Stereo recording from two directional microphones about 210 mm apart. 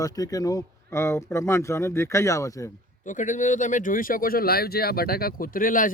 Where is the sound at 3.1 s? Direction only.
35° left (ahead or behind).